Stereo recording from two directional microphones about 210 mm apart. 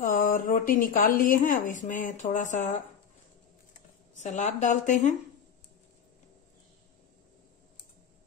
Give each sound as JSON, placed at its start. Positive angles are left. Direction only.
{"t": 0.0, "sound": "speech", "side_deg": 40}